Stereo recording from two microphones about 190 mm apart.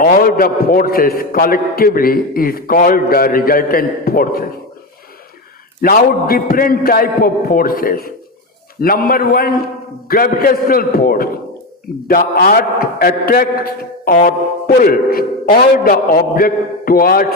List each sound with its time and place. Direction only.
0.0 s a man's voice: 50° left (ahead or behind)
5.8 s a man's voice: 50° left (ahead or behind)